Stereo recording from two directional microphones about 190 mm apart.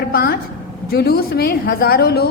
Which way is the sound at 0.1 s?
55° left (ahead or behind).